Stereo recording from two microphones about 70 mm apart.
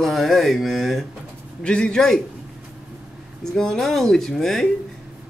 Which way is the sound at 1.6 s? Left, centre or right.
Centre.